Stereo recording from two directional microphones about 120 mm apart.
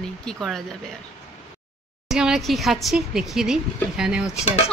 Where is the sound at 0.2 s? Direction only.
5° left (ahead or behind).